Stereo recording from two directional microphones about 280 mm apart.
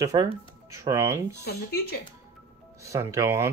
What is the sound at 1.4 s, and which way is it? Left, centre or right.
Speech, left.